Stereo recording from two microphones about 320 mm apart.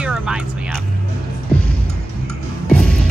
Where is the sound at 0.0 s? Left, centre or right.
Centre.